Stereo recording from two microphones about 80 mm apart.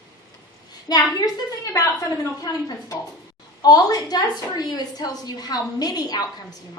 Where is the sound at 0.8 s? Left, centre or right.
Left.